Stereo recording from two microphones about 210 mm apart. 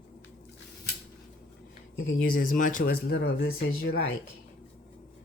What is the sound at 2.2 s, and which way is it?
Speech, 40° left (ahead or behind).